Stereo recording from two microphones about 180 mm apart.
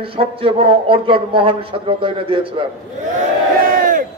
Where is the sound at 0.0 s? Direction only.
30° right (ahead or behind).